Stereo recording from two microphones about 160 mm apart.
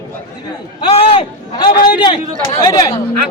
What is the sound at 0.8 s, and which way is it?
A man's voice, 35° left (ahead or behind).